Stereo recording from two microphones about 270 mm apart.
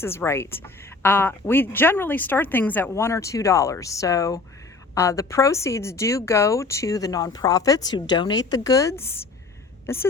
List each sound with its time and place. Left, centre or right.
0.0 s a woman's voice: centre